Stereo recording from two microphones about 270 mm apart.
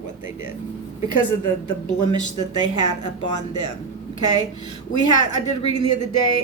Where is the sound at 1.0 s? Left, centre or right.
Left.